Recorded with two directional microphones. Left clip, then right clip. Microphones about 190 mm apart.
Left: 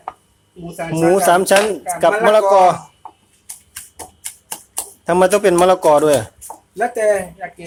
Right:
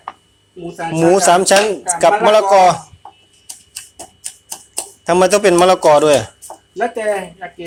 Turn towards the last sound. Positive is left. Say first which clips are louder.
# left 2 dB
turn(degrees=10)  # may be behind; listen again after turning